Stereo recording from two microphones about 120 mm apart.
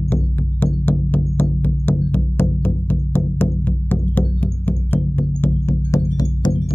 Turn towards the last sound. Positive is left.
turn(degrees=35)  # may be behind; listen again after turning